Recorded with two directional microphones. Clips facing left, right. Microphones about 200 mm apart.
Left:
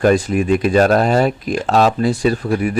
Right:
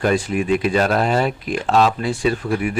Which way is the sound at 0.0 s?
45° left (ahead or behind).